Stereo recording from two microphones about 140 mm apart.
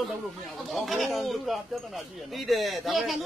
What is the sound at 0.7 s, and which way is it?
Speech, centre (ahead or behind).